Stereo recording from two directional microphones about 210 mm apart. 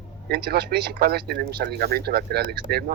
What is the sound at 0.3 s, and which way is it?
Speech, 45° right (ahead or behind).